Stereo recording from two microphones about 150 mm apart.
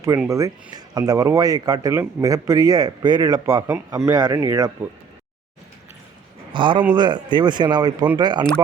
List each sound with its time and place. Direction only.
0.3 s speech: 20° right (ahead or behind)
6.5 s a man's voice: 30° right (ahead or behind)